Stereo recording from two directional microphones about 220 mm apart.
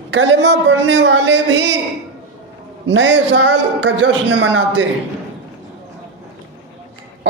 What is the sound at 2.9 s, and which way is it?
Speech, 55° right (ahead or behind).